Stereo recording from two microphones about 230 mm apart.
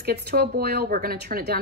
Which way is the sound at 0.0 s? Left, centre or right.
Right.